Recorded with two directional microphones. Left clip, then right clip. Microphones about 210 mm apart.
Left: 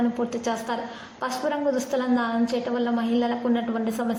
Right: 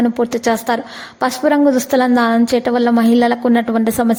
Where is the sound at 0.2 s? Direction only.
45° right (ahead or behind).